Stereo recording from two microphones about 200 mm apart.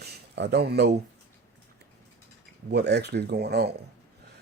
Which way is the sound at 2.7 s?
55° right (ahead or behind).